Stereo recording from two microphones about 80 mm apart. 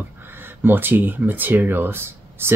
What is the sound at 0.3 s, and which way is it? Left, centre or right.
Speech, right.